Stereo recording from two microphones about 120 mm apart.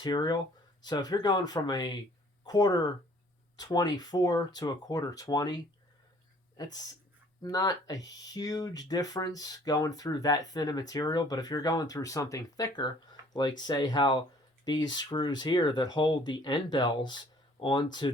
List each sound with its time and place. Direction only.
0.0 s speech: 40° left (ahead or behind)
6.6 s speech: 30° left (ahead or behind)